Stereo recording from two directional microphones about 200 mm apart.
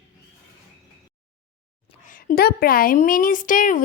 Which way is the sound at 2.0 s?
45° left (ahead or behind).